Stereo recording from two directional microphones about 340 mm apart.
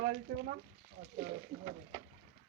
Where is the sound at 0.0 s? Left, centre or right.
Right.